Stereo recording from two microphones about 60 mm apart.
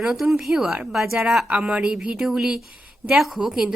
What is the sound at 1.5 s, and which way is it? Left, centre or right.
Speech, centre.